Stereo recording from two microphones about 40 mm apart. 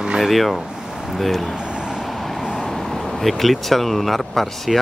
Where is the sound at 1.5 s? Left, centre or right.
Right.